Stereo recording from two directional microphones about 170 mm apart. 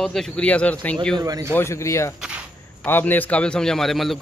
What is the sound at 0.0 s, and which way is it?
Speech, 5° left (ahead or behind).